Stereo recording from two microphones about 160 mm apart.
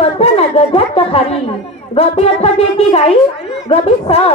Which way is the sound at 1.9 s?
40° left (ahead or behind).